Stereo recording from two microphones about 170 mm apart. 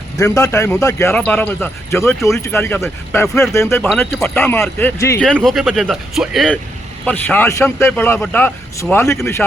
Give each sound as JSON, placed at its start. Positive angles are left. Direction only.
{"t": 0.2, "sound": "a man's voice", "side_deg": 20}
{"t": 5.2, "sound": "a man's voice", "side_deg": 5}